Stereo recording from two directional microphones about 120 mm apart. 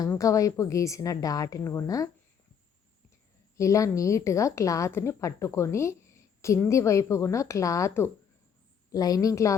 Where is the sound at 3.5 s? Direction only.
25° left (ahead or behind).